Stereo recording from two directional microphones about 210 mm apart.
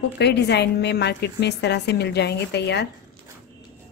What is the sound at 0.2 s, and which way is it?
A woman's voice, 55° left (ahead or behind).